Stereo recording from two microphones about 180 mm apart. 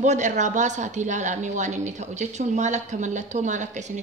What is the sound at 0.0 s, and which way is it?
A woman's voice, 40° right (ahead or behind).